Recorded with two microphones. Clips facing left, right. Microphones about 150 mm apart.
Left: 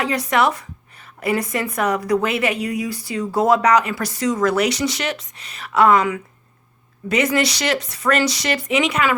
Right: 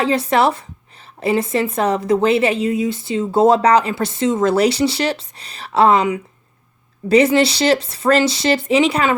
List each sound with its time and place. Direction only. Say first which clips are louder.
0.0 s a woman's voice: right 3 dB; 30° right (ahead or behind)